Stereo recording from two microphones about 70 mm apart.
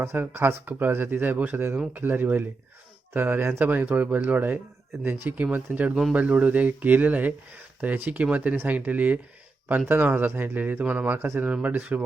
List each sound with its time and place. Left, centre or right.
0.0 s a man's voice: right; by 12.0 s centre